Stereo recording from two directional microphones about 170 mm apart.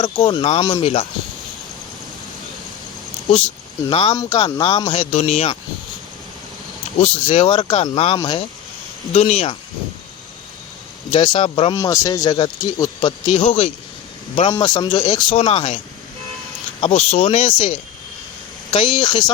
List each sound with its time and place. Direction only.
0.0 s speech: 30° left (ahead or behind)
3.8 s speech: 35° left (ahead or behind)
4.1 s speech: 25° left (ahead or behind); by 5.5 s 40° left (ahead or behind)
7.0 s speech: 35° left (ahead or behind)
8.2 s speech: 25° left (ahead or behind)
9.1 s speech: 40° left (ahead or behind)
11.1 s speech: 30° left (ahead or behind)
11.8 s speech: 20° left (ahead or behind)
15.4 s speech: 35° left (ahead or behind)
16.8 s speech: 40° left (ahead or behind)
18.7 s speech: 30° left (ahead or behind)